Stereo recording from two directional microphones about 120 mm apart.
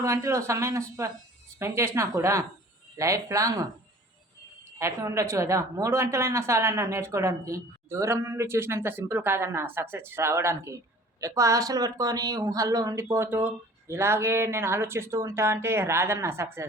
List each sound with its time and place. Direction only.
0.0 s a woman's voice: 25° right (ahead or behind)
4.8 s a woman's voice: 25° right (ahead or behind)